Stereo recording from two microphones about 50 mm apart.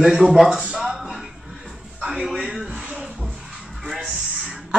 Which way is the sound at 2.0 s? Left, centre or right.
Centre.